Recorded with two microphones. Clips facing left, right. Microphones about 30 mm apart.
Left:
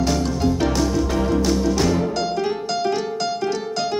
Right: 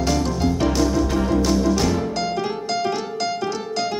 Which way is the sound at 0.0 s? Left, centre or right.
Centre.